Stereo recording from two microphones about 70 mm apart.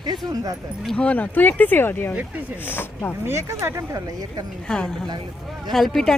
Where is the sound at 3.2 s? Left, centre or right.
Right.